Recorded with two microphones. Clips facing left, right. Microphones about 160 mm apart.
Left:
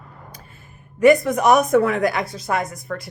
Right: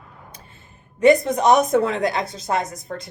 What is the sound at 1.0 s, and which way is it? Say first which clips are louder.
A woman's voice: left 1 dB; 20° right (ahead or behind).